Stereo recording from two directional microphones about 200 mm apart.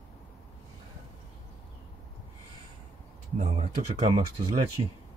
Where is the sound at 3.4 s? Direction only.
35° right (ahead or behind).